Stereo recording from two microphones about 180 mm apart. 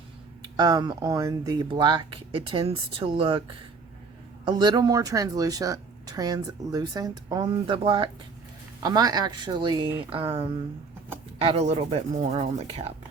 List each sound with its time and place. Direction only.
0.4 s speech: 20° right (ahead or behind)
4.4 s speech: 25° right (ahead or behind)